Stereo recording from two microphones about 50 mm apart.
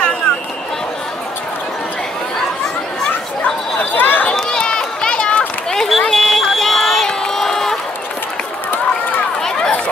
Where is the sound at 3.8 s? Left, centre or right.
Left.